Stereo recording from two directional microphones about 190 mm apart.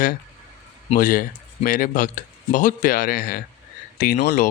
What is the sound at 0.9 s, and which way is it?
Speech, 45° left (ahead or behind).